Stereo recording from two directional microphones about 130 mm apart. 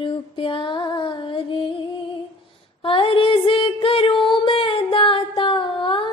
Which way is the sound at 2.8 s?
45° left (ahead or behind).